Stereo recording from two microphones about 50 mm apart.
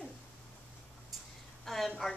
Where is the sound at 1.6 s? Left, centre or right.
Centre.